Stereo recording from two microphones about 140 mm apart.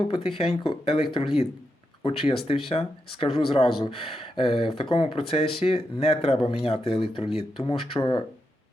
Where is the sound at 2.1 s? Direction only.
45° left (ahead or behind).